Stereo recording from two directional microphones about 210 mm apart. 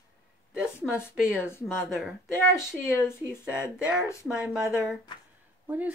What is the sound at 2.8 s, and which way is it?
Speech, 10° left (ahead or behind).